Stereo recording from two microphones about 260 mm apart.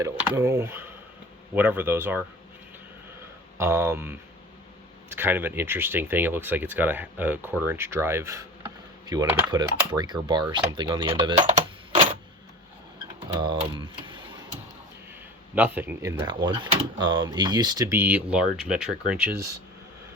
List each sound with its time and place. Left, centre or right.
0.0 s speech: centre
3.6 s speech: centre; by 12.1 s right
13.8 s speech: centre
15.5 s speech: centre